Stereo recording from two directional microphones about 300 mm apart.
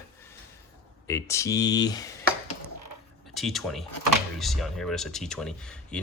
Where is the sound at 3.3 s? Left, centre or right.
Centre.